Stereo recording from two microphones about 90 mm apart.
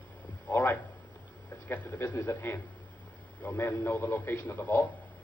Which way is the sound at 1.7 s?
20° left (ahead or behind).